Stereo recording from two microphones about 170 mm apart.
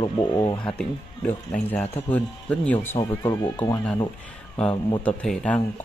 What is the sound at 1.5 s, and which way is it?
Speech, 10° left (ahead or behind).